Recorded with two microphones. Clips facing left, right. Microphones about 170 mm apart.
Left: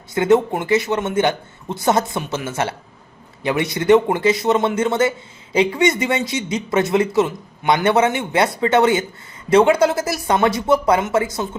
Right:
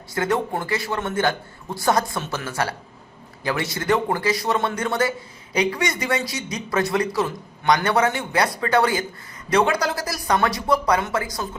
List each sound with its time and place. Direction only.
0.1 s speech: 20° left (ahead or behind)